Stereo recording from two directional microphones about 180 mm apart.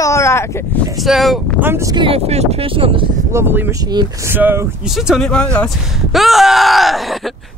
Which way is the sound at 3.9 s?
25° right (ahead or behind).